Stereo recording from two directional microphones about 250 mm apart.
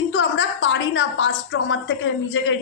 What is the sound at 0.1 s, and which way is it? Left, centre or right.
A woman's voice, left.